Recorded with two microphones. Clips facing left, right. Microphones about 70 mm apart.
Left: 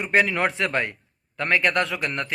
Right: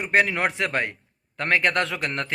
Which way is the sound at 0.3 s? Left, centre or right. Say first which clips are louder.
Left 1 dB; right.